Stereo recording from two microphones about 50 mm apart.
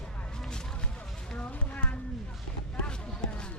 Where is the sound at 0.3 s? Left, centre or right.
Centre.